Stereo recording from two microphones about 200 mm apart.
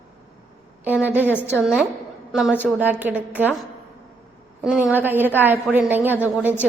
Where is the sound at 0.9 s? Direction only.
10° right (ahead or behind).